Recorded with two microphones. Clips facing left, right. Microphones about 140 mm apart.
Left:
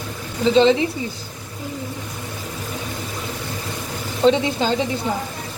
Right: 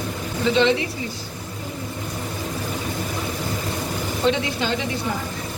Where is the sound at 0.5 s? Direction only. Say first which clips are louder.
Left 5 dB; 35° left (ahead or behind).